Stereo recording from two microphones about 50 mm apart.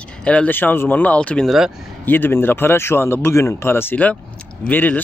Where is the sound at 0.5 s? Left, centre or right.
Left.